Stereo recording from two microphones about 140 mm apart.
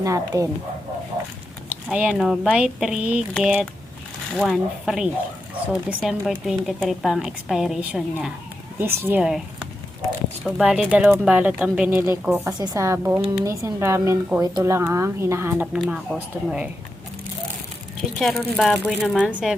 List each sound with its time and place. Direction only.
0.0 s speech: 20° right (ahead or behind)
1.7 s a woman's voice: 5° right (ahead or behind)
8.8 s speech: 15° right (ahead or behind)
9.2 s speech: 5° right (ahead or behind)
18.2 s a woman's voice: centre (ahead or behind)